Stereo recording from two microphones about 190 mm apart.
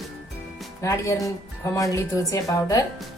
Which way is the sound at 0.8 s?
15° left (ahead or behind).